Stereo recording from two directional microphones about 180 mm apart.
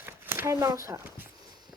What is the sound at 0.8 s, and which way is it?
Speech, 15° right (ahead or behind).